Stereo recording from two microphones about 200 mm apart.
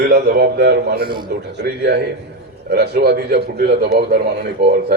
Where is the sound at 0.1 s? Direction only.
50° right (ahead or behind).